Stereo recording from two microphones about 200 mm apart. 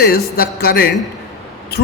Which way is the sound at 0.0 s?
50° left (ahead or behind).